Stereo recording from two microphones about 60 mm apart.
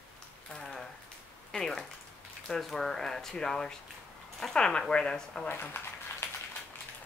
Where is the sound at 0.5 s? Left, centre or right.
Centre.